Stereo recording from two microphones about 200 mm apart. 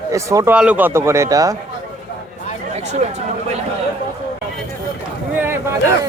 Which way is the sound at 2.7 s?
35° right (ahead or behind).